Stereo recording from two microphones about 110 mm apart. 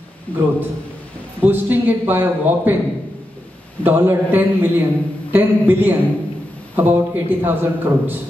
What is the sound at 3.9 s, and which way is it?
A man's voice, 20° right (ahead or behind).